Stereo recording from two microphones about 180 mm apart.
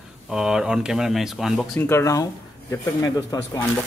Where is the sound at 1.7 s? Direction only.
15° left (ahead or behind).